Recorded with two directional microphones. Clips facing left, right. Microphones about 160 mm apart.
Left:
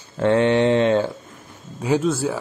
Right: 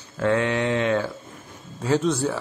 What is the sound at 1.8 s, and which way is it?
Speech, 10° left (ahead or behind).